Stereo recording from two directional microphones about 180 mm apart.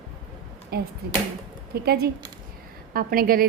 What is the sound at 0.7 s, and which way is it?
A woman's voice, 60° right (ahead or behind).